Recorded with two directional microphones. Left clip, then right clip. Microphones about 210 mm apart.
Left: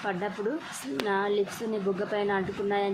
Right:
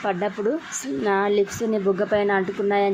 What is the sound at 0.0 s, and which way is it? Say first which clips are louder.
Speech: right 7 dB; 20° right (ahead or behind).